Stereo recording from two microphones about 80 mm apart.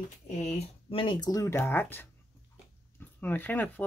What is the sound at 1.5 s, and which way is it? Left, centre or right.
Speech, left.